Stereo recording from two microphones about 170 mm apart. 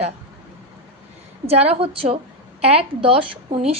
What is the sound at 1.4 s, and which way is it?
A woman's voice, 40° right (ahead or behind).